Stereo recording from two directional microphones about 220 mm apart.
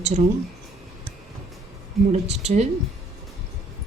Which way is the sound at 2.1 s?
30° right (ahead or behind).